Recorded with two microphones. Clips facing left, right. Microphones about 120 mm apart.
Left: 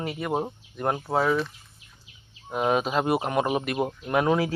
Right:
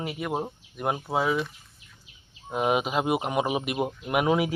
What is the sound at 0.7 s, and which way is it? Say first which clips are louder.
Speech: left 2 dB; 10° right (ahead or behind).